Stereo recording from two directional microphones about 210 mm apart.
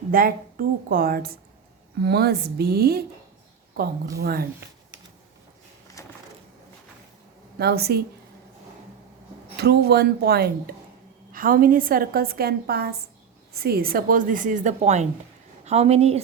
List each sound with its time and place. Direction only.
0.1 s a woman's voice: 45° right (ahead or behind)
4.2 s a woman's voice: 45° right (ahead or behind)
6.0 s a sound: 15° left (ahead or behind)
7.6 s a woman's voice: 50° right (ahead or behind)
9.6 s a woman's voice: 50° right (ahead or behind); by 16.2 s 30° right (ahead or behind)